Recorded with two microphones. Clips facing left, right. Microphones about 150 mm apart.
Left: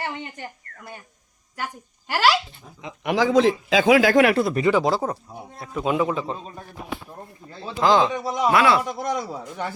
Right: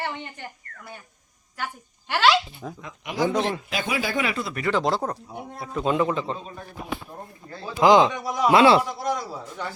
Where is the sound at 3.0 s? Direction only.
80° left; by 4.5 s 65° left (ahead or behind).